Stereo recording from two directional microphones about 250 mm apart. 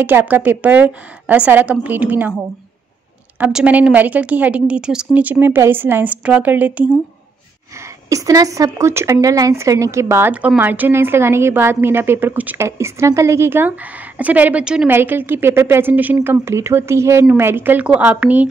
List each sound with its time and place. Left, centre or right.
0.0 s a woman's voice: centre
3.3 s a woman's voice: centre
8.1 s a woman's voice: centre